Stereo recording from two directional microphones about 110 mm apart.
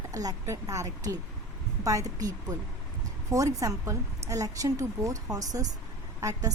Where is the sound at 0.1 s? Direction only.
30° right (ahead or behind).